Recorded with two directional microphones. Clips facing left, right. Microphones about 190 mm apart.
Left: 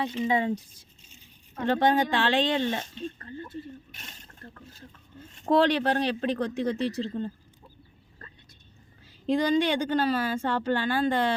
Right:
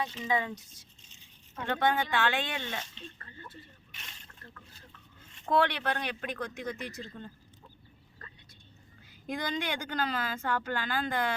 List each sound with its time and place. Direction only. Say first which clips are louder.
0.3 s a woman's voice: left 4 dB; 30° left (ahead or behind)
9.2 s a woman's voice: left 11 dB; 30° left (ahead or behind)